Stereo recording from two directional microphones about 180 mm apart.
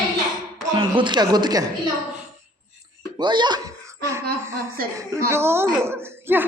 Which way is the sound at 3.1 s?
25° right (ahead or behind).